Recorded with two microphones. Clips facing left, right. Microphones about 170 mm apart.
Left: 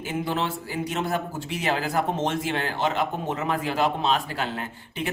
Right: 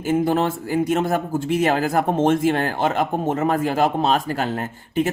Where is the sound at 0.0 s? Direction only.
45° right (ahead or behind).